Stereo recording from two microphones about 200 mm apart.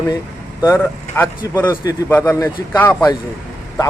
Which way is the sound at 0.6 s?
10° left (ahead or behind).